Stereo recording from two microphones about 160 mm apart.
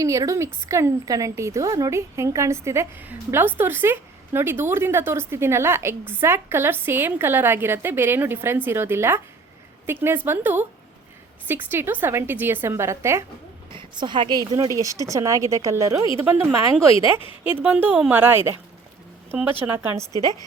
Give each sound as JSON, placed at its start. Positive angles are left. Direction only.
{"t": 0.0, "sound": "a woman's voice", "side_deg": -20}
{"t": 13.7, "sound": "a woman's voice", "side_deg": -30}
{"t": 16.9, "sound": "a woman's voice", "side_deg": 35}
{"t": 17.6, "sound": "a woman's voice", "side_deg": -10}